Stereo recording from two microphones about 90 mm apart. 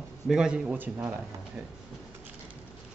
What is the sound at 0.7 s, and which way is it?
Speech, 20° right (ahead or behind).